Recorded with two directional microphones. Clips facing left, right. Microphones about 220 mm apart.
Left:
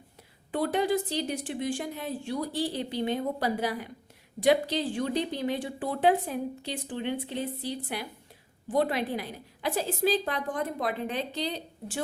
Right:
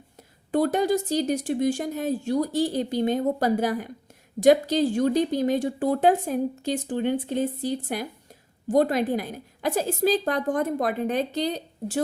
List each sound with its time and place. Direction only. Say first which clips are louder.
0.5 s speech: right 5 dB; 45° right (ahead or behind)